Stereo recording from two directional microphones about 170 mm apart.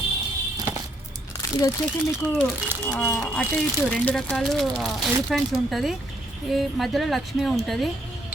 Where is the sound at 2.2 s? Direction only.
5° left (ahead or behind).